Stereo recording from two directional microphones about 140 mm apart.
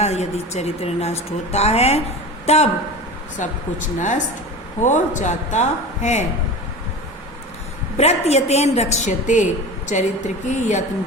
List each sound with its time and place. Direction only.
0.0 s a woman's voice: 50° left (ahead or behind)
3.3 s a woman's voice: 60° left (ahead or behind)
7.9 s a woman's voice: 50° left (ahead or behind)